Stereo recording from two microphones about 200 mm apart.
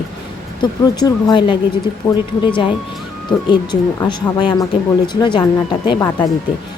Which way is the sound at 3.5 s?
20° left (ahead or behind).